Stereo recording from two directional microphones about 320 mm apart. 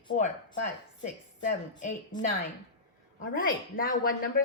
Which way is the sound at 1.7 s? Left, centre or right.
Centre.